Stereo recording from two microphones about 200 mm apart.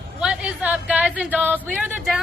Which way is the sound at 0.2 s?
5° right (ahead or behind).